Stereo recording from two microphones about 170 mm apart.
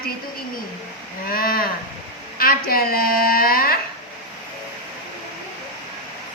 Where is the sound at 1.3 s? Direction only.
60° left (ahead or behind).